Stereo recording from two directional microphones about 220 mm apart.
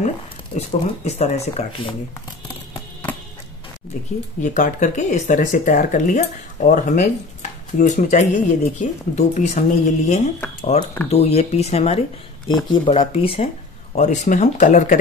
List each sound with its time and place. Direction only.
0.6 s speech: 30° left (ahead or behind)
2.4 s music: 20° left (ahead or behind)
4.4 s speech: 35° left (ahead or behind)